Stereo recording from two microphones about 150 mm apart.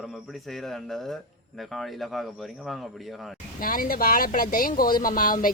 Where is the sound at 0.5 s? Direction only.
Centre (ahead or behind).